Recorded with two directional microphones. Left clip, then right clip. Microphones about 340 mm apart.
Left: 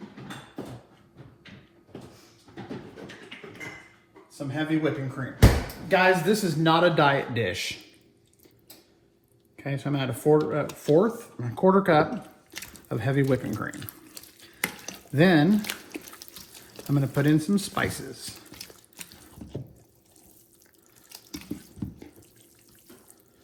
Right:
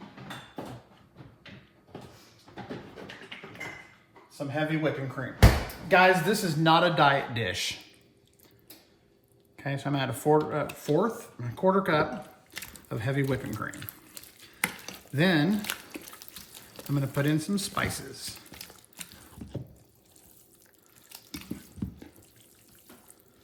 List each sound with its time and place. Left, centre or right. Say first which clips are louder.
4.3 s speech: left 1 dB; right; by 7.8 s centre
9.6 s speech: even; centre
12.5 s a sound: left 5 dB; centre
21.1 s sink: left 3 dB; centre